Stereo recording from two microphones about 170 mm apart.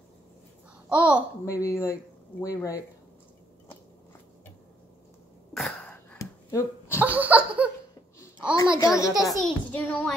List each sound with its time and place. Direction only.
0.8 s a child's voice: 10° right (ahead or behind)
1.4 s speech: 15° left (ahead or behind)
5.5 s throat clearing: 5° left (ahead or behind)
6.1 s a sound: 20° left (ahead or behind)
7.0 s laughter: 10° right (ahead or behind)
8.7 s a child's voice: 20° left (ahead or behind)
9.4 s a child's voice: 5° left (ahead or behind)